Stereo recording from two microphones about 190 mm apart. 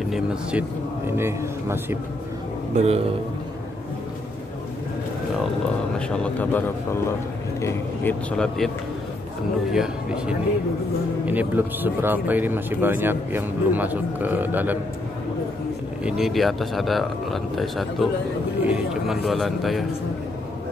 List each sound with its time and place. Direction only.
0.1 s speech: 5° right (ahead or behind)
2.7 s a man's voice: 35° right (ahead or behind)
5.9 s speech: 5° left (ahead or behind)
16.0 s speech: 5° right (ahead or behind)